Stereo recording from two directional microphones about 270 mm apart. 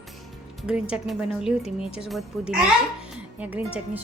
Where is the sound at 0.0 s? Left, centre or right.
Centre.